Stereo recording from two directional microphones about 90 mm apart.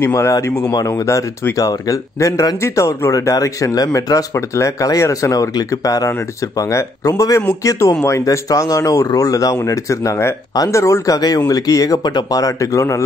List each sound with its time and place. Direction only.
0.0 s speech: 35° left (ahead or behind)